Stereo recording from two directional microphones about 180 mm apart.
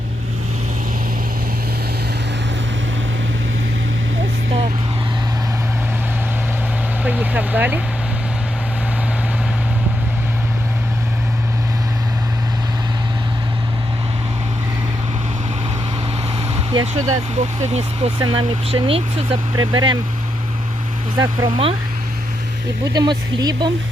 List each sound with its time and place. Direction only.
7.0 s vehicle: 10° right (ahead or behind)
16.8 s speech: 35° right (ahead or behind)
21.2 s speech: 25° right (ahead or behind)
22.9 s speech: 20° right (ahead or behind)